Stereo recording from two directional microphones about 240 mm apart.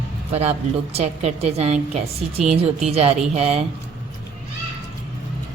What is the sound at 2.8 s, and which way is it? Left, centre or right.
Speech, right.